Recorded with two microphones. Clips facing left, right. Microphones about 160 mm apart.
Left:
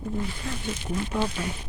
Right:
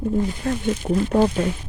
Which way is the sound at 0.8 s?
45° right (ahead or behind).